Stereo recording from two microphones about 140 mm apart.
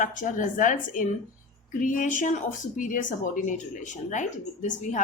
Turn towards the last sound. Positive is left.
turn(degrees=60)  # may be behind; listen again after turning